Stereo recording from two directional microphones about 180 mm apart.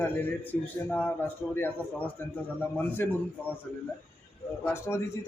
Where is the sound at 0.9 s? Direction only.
5° left (ahead or behind).